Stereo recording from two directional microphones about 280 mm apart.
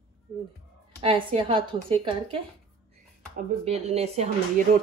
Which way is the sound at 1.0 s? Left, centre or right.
Centre.